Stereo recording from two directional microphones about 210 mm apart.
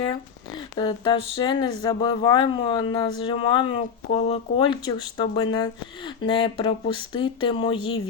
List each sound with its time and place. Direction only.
0.8 s speech: 20° left (ahead or behind)